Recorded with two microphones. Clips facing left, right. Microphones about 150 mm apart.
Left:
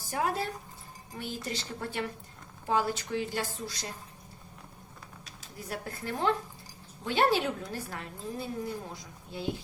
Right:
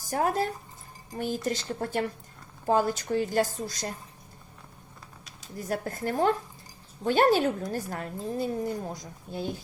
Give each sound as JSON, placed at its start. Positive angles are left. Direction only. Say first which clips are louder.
{"t": 0.1, "sound": "a woman's voice", "louder": "right 4 dB", "side_deg": -45}
{"t": 5.5, "sound": "a woman's voice", "louder": "right 7 dB", "side_deg": -45}